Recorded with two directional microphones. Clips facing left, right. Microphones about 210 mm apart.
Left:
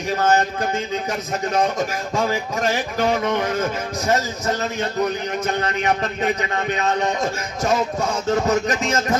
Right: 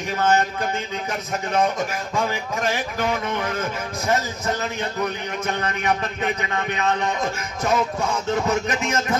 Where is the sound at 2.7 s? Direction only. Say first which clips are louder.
Left 4 dB; 40° left (ahead or behind).